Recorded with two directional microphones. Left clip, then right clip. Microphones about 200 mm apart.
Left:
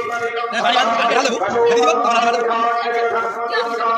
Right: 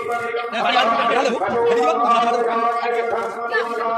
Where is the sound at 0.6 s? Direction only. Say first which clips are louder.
Left 1 dB; 40° left (ahead or behind).